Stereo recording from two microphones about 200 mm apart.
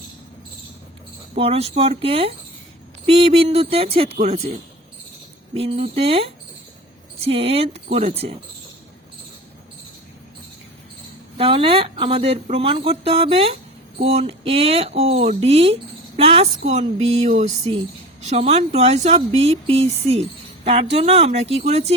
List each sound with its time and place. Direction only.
1.4 s speech: 30° right (ahead or behind)
5.5 s speech: 30° right (ahead or behind)
11.3 s speech: 25° right (ahead or behind)